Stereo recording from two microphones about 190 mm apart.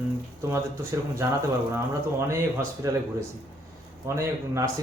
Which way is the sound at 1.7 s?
15° right (ahead or behind).